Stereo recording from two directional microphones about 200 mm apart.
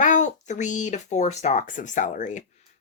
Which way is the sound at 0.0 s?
40° left (ahead or behind).